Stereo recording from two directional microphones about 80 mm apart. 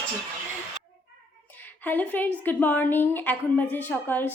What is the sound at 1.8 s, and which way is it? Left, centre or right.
A woman's voice, left.